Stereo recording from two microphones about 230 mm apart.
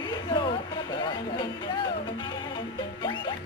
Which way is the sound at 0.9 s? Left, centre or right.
Centre.